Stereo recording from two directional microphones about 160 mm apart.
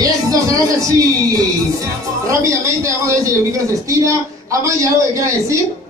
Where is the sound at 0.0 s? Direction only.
20° right (ahead or behind).